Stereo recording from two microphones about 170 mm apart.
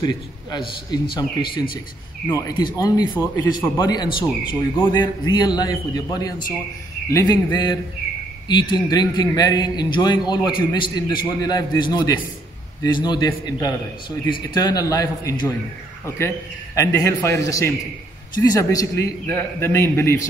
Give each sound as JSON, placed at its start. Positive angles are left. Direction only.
{"t": 0.0, "sound": "a man's voice", "side_deg": 25}